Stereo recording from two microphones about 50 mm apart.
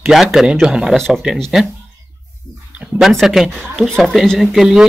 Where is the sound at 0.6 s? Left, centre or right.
Centre.